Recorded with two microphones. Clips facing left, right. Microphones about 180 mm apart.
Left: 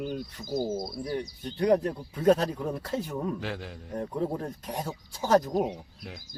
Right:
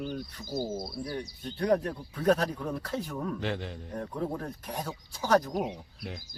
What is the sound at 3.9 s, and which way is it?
Speech, 20° left (ahead or behind).